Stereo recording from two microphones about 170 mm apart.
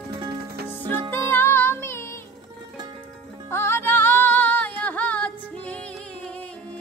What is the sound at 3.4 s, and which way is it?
Music, 15° left (ahead or behind).